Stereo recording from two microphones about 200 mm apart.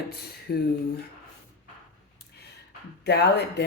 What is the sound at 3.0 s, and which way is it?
Speech, 55° left (ahead or behind).